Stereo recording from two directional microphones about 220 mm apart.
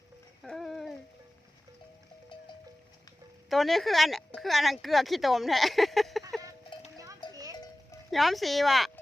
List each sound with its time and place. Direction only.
0.4 s a sound: centre (ahead or behind)
3.5 s speech: centre (ahead or behind)
6.9 s music: 15° right (ahead or behind)
7.5 s music: 15° left (ahead or behind)
8.1 s speech: centre (ahead or behind)